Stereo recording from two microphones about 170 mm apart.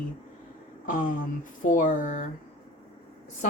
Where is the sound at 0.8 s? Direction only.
50° left (ahead or behind).